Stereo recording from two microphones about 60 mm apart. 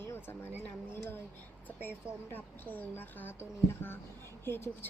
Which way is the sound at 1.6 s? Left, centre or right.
Left.